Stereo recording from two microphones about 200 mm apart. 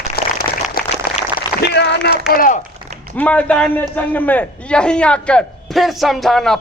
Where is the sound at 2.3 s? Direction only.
45° left (ahead or behind).